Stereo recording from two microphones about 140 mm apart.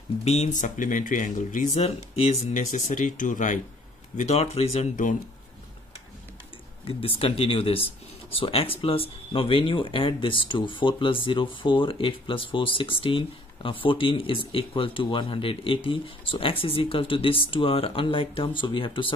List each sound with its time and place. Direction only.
0.2 s speech: 50° left (ahead or behind)
4.2 s speech: 50° left (ahead or behind)
6.8 s speech: 40° left (ahead or behind)